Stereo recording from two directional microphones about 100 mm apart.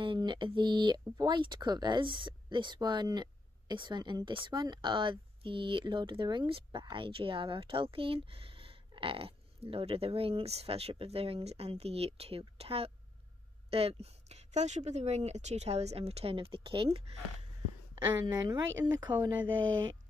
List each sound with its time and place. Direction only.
0.0 s speech: 50° right (ahead or behind)
17.9 s speech: 45° right (ahead or behind)